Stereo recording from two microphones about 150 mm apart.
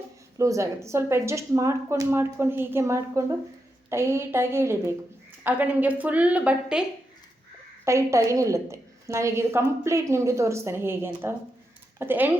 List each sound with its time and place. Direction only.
0.3 s a woman's voice: 20° right (ahead or behind)
7.9 s a woman's voice: 20° right (ahead or behind)